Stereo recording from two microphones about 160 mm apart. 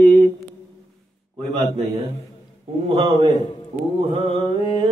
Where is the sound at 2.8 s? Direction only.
35° right (ahead or behind).